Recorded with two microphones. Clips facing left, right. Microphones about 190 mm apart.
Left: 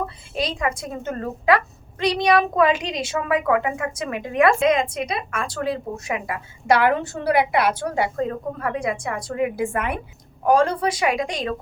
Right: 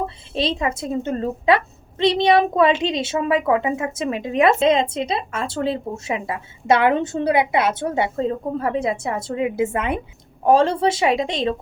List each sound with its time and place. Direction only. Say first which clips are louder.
0.0 s a woman's voice: right 3 dB; 25° right (ahead or behind)